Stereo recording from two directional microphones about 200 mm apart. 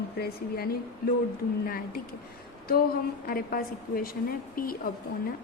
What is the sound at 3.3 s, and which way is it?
A woman's voice, 45° left (ahead or behind).